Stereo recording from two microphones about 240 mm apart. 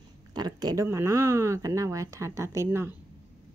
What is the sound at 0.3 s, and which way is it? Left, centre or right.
A woman's voice, centre.